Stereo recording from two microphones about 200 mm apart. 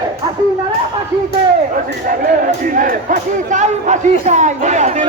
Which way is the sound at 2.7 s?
40° right (ahead or behind).